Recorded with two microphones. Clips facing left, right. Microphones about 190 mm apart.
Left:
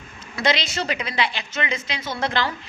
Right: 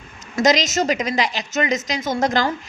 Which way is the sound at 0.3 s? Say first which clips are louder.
Right 6 dB; 40° right (ahead or behind).